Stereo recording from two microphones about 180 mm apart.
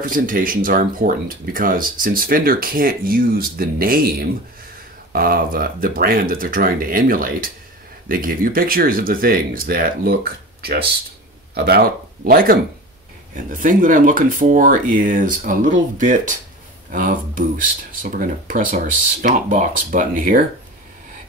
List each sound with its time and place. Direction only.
0.0 s speech: 50° right (ahead or behind)